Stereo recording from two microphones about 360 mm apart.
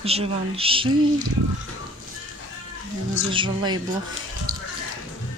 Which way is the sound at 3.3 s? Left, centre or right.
Centre.